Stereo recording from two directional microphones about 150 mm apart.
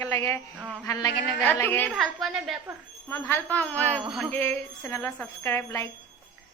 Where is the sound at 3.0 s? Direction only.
15° left (ahead or behind).